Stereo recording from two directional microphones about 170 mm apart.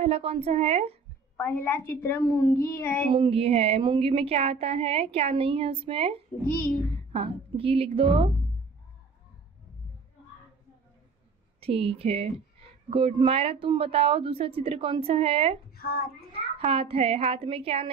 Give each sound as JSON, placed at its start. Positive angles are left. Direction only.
{"t": 0.0, "sound": "speech", "side_deg": -35}
{"t": 1.3, "sound": "a woman's voice", "side_deg": 10}
{"t": 3.1, "sound": "speech", "side_deg": -30}
{"t": 6.4, "sound": "a child's voice", "side_deg": 55}
{"t": 7.1, "sound": "a woman's voice", "side_deg": -35}
{"t": 11.6, "sound": "speech", "side_deg": -35}
{"t": 15.7, "sound": "a child's voice", "side_deg": 65}
{"t": 16.3, "sound": "a child's voice", "side_deg": -35}